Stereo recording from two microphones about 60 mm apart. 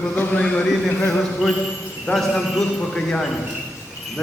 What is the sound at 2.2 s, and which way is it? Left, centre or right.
Speech, centre.